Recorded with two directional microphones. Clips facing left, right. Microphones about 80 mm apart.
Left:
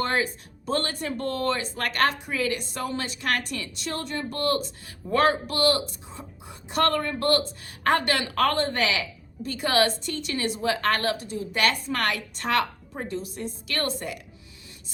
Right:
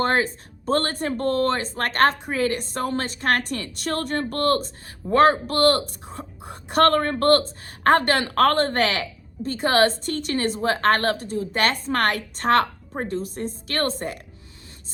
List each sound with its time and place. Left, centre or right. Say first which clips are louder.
0.0 s speech: right 4 dB; right